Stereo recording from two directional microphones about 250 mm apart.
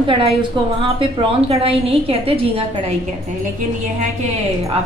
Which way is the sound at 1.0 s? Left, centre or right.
Right.